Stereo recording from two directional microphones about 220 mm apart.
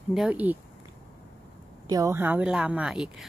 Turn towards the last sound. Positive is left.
turn(degrees=-5)  # may be behind; listen again after turning